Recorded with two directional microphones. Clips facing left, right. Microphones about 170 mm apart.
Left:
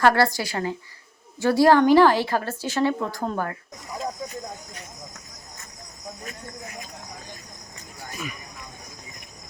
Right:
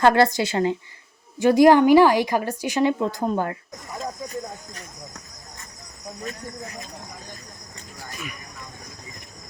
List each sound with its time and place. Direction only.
0.0 s a woman's voice: 20° right (ahead or behind)